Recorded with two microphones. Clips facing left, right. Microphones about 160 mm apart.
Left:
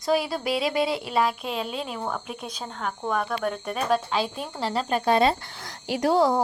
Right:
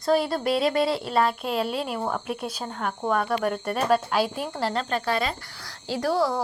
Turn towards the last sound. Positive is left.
turn(degrees=20)  # may be behind; listen again after turning